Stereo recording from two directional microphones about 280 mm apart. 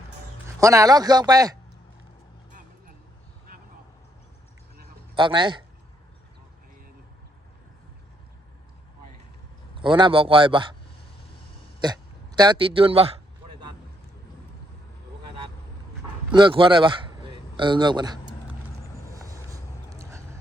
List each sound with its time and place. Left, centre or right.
0.4 s speech: centre
5.1 s speech: centre
9.7 s speech: centre
11.8 s speech: centre
16.3 s a man's voice: centre
19.1 s vehicle: centre